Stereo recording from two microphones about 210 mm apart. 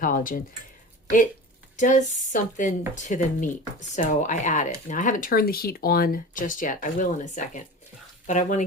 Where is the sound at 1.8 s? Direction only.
35° left (ahead or behind).